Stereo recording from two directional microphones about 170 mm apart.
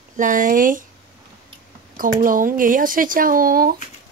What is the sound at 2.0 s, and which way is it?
Speech, 55° right (ahead or behind).